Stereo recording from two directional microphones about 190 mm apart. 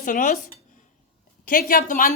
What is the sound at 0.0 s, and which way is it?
Speech, 45° left (ahead or behind).